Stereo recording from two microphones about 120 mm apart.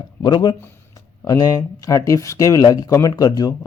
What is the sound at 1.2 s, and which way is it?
Speech, 30° left (ahead or behind).